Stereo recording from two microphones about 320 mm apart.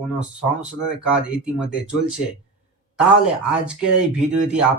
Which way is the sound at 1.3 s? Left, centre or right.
Centre.